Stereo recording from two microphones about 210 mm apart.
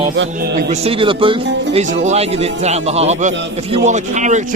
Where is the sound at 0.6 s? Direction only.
30° right (ahead or behind).